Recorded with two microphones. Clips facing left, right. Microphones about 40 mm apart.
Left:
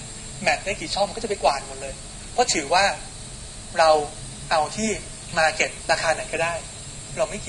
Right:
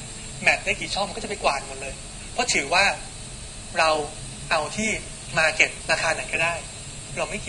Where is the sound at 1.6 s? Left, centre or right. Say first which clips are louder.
Even; centre.